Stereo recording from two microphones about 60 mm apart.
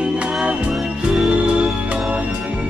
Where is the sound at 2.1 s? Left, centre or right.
Right.